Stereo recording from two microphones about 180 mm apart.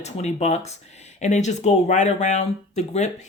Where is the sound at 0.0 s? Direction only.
40° left (ahead or behind).